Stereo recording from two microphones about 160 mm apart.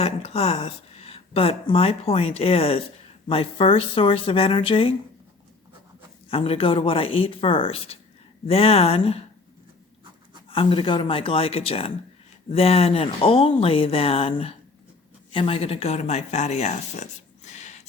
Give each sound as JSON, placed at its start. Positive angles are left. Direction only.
{"t": 0.0, "sound": "speech", "side_deg": 40}
{"t": 6.2, "sound": "speech", "side_deg": 35}
{"t": 10.5, "sound": "speech", "side_deg": 35}